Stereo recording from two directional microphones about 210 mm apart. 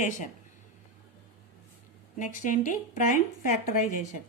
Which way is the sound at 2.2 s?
35° left (ahead or behind).